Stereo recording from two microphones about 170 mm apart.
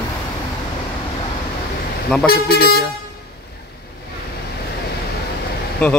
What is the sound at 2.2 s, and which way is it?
Speech, 65° left (ahead or behind).